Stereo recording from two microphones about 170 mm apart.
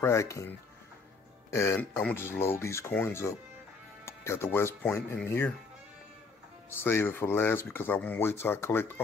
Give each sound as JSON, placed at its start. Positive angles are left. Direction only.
{"t": 0.0, "sound": "speech", "side_deg": 15}
{"t": 6.8, "sound": "speech", "side_deg": 15}